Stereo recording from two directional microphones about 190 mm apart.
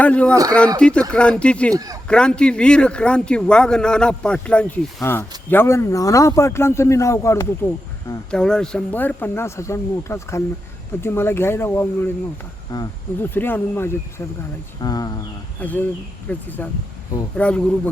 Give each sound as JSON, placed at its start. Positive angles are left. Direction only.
{"t": 0.0, "sound": "a man's voice", "side_deg": 5}
{"t": 1.7, "sound": "speech", "side_deg": -20}
{"t": 2.0, "sound": "a man's voice", "side_deg": 5}
{"t": 8.3, "sound": "a man's voice", "side_deg": 5}
{"t": 15.6, "sound": "a man's voice", "side_deg": 10}